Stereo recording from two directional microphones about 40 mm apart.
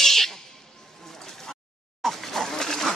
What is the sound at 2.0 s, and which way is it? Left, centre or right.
Pig, centre.